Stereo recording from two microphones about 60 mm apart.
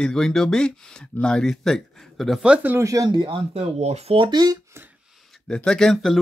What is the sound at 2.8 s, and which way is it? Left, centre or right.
Speech, right.